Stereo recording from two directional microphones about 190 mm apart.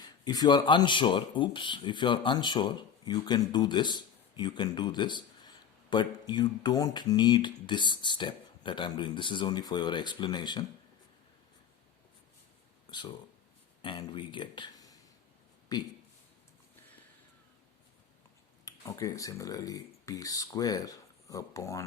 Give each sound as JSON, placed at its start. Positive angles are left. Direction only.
{"t": 0.0, "sound": "speech", "side_deg": 20}
{"t": 13.8, "sound": "speech", "side_deg": 25}
{"t": 18.6, "sound": "speech", "side_deg": 15}